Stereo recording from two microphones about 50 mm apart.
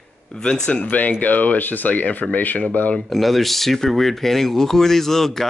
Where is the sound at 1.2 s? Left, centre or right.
Left.